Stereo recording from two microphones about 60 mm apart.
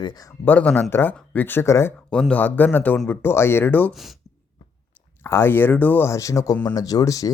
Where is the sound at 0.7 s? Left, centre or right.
Left.